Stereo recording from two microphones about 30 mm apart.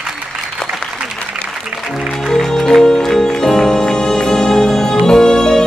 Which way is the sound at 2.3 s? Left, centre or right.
Centre.